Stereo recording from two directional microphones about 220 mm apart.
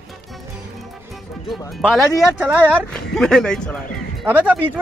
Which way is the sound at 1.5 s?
Centre (ahead or behind).